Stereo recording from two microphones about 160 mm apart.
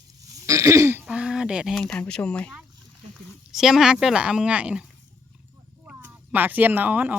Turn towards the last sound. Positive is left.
turn(degrees=-10)  # may be behind; listen again after turning